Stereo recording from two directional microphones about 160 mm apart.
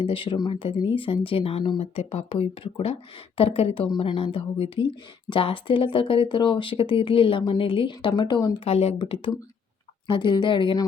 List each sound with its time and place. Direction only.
0.0 s speech: 35° left (ahead or behind)
8.6 s a woman's voice: 40° left (ahead or behind)